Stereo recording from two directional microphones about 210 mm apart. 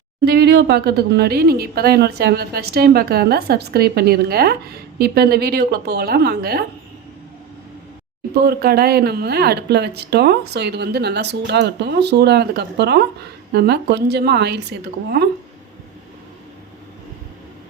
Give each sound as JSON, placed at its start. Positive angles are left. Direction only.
{"t": 0.3, "sound": "speech", "side_deg": -50}
{"t": 8.4, "sound": "speech", "side_deg": -50}